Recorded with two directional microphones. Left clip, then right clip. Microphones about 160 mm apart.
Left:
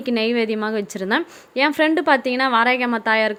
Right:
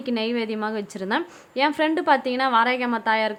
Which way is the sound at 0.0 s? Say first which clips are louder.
Left 5 dB; 20° left (ahead or behind).